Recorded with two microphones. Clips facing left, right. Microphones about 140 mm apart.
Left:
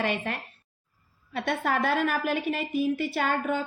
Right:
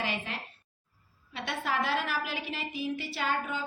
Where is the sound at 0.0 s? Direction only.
55° left (ahead or behind).